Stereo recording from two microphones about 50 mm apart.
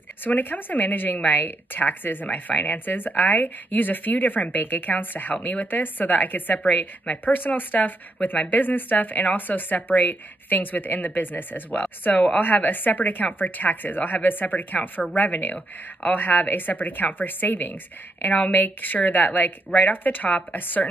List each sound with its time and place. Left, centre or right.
0.2 s speech: left